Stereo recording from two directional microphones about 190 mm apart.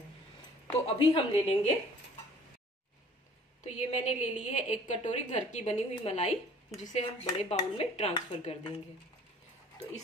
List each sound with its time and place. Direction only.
0.8 s a woman's voice: 30° left (ahead or behind)
3.6 s a woman's voice: 35° left (ahead or behind)